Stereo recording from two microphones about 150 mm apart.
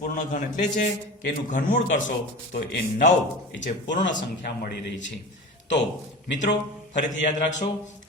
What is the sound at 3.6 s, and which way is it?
Speech, 55° left (ahead or behind).